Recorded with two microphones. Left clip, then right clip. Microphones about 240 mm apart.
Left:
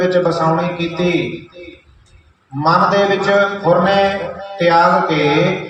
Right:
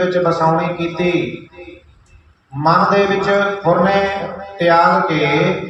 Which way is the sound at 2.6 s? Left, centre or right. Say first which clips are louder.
Even; left.